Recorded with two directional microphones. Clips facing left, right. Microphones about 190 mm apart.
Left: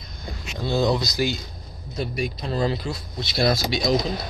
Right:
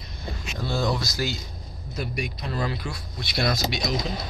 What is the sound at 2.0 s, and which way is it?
Speech, 30° left (ahead or behind).